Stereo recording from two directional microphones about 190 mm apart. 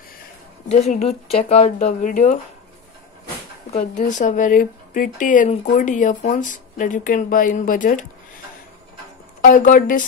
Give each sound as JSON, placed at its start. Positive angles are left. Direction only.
{"t": 0.7, "sound": "speech", "side_deg": 35}
{"t": 3.7, "sound": "speech", "side_deg": 40}
{"t": 9.4, "sound": "speech", "side_deg": 45}